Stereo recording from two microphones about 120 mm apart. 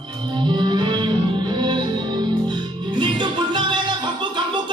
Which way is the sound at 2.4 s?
40° right (ahead or behind).